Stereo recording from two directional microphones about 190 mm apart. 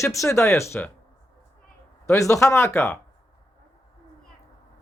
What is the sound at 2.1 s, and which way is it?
Speech, 15° left (ahead or behind).